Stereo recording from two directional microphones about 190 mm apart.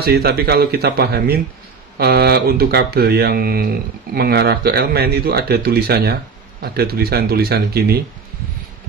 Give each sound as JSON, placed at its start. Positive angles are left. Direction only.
{"t": 0.0, "sound": "speech", "side_deg": -55}